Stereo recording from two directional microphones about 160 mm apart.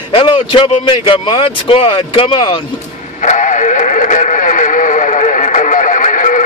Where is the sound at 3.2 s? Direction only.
50° left (ahead or behind).